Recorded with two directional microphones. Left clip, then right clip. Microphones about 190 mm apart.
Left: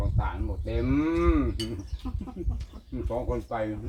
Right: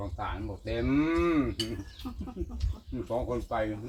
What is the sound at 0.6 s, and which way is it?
Cattle, 20° left (ahead or behind).